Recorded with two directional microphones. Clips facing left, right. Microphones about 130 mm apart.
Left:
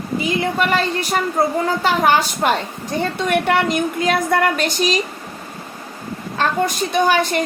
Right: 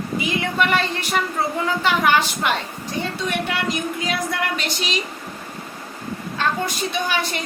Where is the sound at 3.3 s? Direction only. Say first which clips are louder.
Left 9 dB; 55° left (ahead or behind).